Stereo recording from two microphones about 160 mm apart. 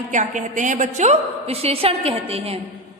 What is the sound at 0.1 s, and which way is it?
A woman's voice, 50° right (ahead or behind).